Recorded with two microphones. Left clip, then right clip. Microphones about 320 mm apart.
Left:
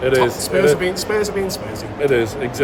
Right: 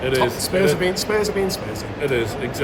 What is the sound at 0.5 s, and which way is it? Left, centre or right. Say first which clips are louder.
Speech: left 4 dB; centre.